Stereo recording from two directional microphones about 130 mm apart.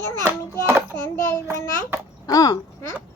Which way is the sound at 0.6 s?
15° right (ahead or behind).